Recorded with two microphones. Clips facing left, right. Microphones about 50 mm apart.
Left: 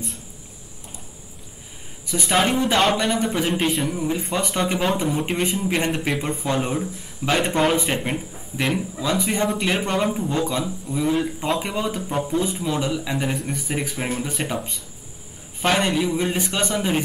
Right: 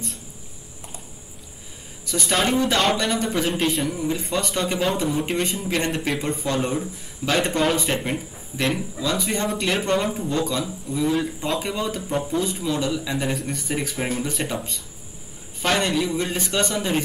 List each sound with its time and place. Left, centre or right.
2.0 s a man's voice: centre